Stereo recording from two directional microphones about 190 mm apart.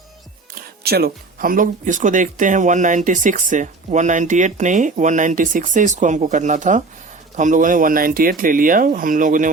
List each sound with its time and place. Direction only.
0.5 s speech: 55° right (ahead or behind)